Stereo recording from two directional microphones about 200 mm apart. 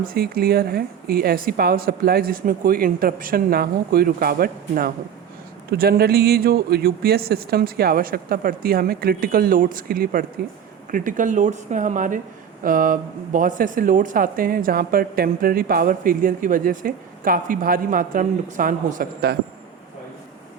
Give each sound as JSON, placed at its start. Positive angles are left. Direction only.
{"t": 0.0, "sound": "speech", "side_deg": -50}